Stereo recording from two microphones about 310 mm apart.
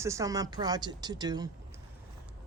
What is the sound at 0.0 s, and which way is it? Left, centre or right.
Speech, centre.